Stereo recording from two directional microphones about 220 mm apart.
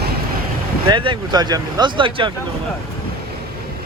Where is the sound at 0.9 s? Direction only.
20° right (ahead or behind).